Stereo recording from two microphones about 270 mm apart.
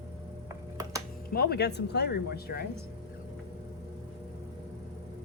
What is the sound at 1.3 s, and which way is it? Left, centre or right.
Speech, left.